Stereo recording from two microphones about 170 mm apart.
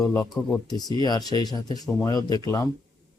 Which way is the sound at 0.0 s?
20° left (ahead or behind).